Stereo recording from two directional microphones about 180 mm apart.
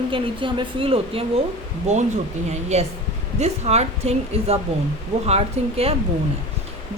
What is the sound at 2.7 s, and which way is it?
Speech, 35° right (ahead or behind).